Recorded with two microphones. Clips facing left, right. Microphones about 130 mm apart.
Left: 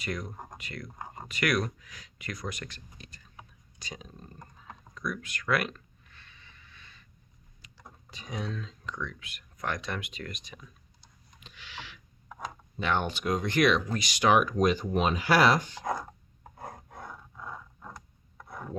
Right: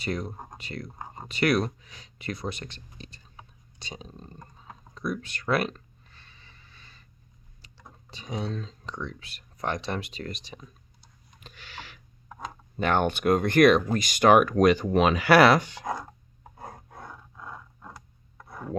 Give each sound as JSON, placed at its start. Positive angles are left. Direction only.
{"t": 0.0, "sound": "speech", "side_deg": -30}
{"t": 4.9, "sound": "a sound", "side_deg": -30}
{"t": 8.1, "sound": "speech", "side_deg": -30}
{"t": 11.3, "sound": "a sound", "side_deg": -45}
{"t": 12.8, "sound": "speech", "side_deg": -50}
{"t": 15.8, "sound": "speech", "side_deg": 0}
{"t": 16.9, "sound": "roar", "side_deg": 0}
{"t": 18.3, "sound": "chopping", "side_deg": -5}